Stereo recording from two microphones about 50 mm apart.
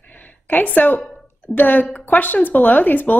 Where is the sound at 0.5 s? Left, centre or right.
Left.